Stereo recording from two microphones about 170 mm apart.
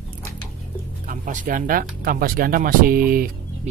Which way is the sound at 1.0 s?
50° right (ahead or behind).